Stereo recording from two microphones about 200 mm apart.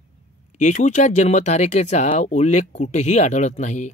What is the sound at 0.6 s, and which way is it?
Speech, 35° left (ahead or behind).